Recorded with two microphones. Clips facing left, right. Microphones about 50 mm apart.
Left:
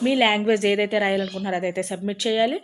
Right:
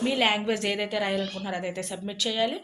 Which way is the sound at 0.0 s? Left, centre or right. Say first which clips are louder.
Left 5 dB; centre.